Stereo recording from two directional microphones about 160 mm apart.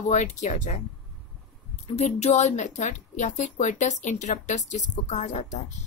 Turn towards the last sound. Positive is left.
turn(degrees=50)  # may be behind; listen again after turning